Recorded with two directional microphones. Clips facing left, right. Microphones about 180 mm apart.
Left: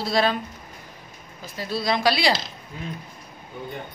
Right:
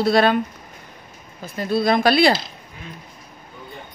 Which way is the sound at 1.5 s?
55° right (ahead or behind).